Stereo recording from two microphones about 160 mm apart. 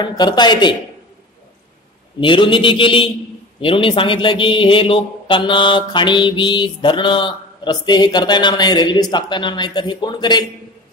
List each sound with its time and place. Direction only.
0.0 s a man's voice: 25° left (ahead or behind)
2.1 s a man's voice: 30° left (ahead or behind)